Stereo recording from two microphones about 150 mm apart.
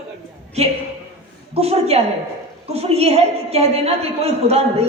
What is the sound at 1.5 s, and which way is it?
A woman's voice, 45° right (ahead or behind).